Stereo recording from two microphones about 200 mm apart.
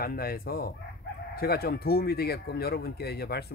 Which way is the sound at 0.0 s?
50° left (ahead or behind).